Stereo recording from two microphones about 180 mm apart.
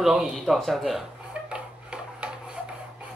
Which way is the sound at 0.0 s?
Centre (ahead or behind).